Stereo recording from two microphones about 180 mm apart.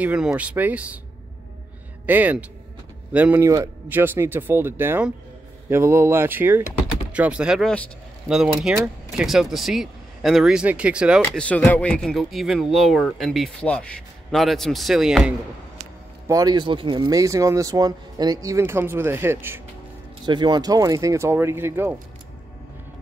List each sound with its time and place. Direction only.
0.0 s a man's voice: 5° right (ahead or behind)
2.0 s a man's voice: 10° right (ahead or behind)
11.2 s speech: 10° left (ahead or behind)
16.3 s speech: 20° right (ahead or behind)
20.2 s a man's voice: 25° right (ahead or behind)